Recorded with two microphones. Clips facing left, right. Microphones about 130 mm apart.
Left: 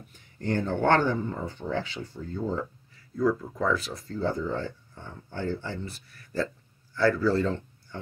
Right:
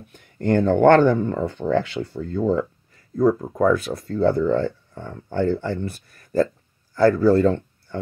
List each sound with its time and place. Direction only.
0.1 s speech: 60° right (ahead or behind)
3.2 s speech: 50° right (ahead or behind)